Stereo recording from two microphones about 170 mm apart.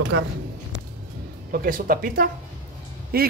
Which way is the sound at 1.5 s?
55° right (ahead or behind).